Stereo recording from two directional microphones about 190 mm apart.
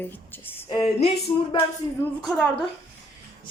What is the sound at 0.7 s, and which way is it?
Music, 25° left (ahead or behind).